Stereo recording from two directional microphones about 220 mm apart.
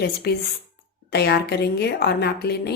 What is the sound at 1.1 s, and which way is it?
Speech, 50° left (ahead or behind).